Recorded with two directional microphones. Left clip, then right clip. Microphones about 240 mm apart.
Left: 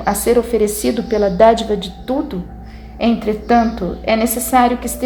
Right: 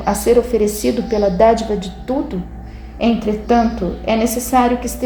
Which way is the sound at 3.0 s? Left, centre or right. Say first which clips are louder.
Even; centre.